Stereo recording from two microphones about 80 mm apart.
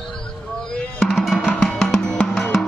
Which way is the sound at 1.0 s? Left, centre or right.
Centre.